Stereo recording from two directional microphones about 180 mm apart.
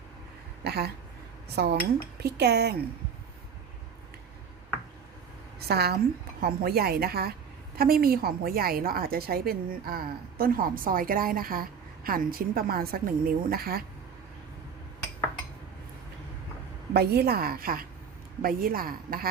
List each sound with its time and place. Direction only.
0.6 s a woman's voice: 65° right (ahead or behind)
5.5 s a woman's voice: 60° right (ahead or behind)
16.9 s a woman's voice: 60° right (ahead or behind)